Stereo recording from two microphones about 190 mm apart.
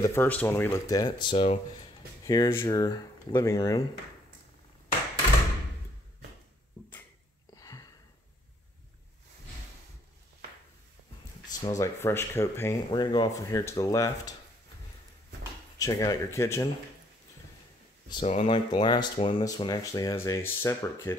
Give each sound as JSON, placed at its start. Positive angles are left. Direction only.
{"t": 0.0, "sound": "speech", "side_deg": 15}
{"t": 7.5, "sound": "sniff", "side_deg": 20}
{"t": 11.4, "sound": "speech", "side_deg": 20}
{"t": 15.8, "sound": "speech", "side_deg": 20}
{"t": 18.2, "sound": "speech", "side_deg": 35}
{"t": 18.7, "sound": "speech", "side_deg": 25}